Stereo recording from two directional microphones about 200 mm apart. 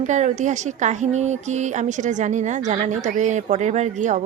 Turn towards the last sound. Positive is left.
turn(degrees=-35)  # may be behind; listen again after turning